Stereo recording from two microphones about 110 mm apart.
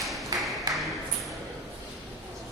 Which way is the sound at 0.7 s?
35° right (ahead or behind).